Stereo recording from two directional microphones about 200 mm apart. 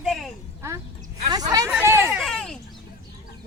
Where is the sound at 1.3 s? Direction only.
20° right (ahead or behind).